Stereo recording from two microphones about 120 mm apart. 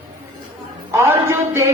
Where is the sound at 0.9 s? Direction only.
20° right (ahead or behind).